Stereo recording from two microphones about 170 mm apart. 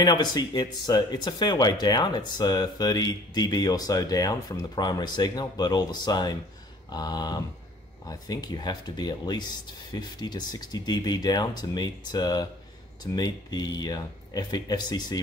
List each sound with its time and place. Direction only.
0.0 s speech: 25° left (ahead or behind)